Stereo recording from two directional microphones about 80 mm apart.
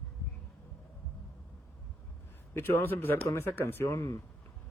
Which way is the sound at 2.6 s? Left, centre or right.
Left.